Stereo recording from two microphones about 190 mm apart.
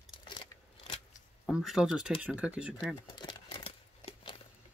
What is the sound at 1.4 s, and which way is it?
Speech, centre (ahead or behind).